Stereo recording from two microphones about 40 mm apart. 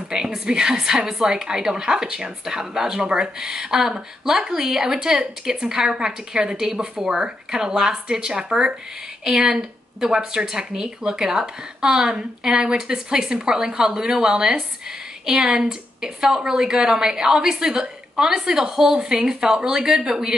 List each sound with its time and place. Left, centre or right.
0.1 s a woman's voice: centre
3.7 s a woman's voice: centre